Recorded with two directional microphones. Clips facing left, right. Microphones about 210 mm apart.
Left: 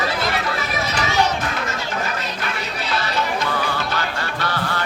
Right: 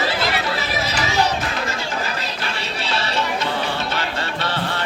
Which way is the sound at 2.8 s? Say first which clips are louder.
Even; 25° right (ahead or behind).